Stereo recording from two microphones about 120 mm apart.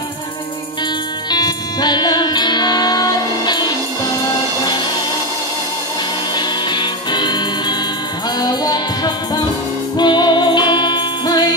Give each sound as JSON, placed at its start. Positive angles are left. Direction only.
{"t": 1.3, "sound": "music", "side_deg": 35}
{"t": 6.3, "sound": "music", "side_deg": 40}